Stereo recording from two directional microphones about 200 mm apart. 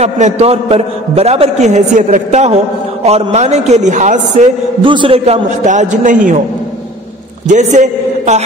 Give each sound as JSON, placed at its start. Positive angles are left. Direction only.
{"t": 0.0, "sound": "a man's voice", "side_deg": -30}
{"t": 4.8, "sound": "a man's voice", "side_deg": -25}
{"t": 7.4, "sound": "a man's voice", "side_deg": -35}